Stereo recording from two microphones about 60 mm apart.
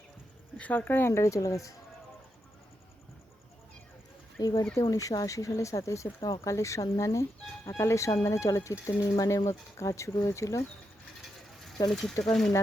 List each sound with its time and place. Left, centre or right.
0.6 s speech: left
1.1 s speech: left
4.4 s speech: left
4.9 s speech: left
11.9 s speech: centre